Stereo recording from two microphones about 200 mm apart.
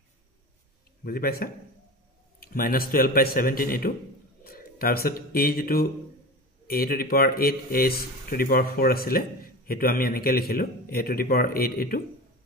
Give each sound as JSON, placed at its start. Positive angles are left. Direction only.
{"t": 1.0, "sound": "speech", "side_deg": 50}